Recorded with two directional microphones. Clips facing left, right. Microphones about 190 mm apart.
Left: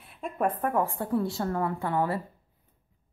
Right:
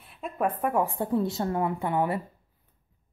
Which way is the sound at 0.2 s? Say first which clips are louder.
Even; 5° right (ahead or behind).